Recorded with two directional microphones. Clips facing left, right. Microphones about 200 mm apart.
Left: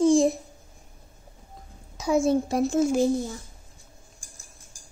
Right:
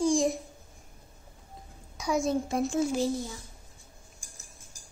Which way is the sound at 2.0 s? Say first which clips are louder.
Left 6 dB; 30° left (ahead or behind).